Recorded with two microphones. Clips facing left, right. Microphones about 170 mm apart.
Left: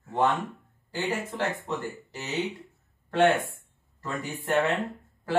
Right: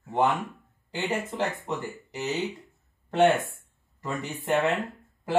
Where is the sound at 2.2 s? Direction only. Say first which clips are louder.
Right 1 dB; centre (ahead or behind).